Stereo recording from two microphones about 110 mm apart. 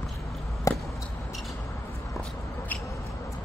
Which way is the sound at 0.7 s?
30° left (ahead or behind).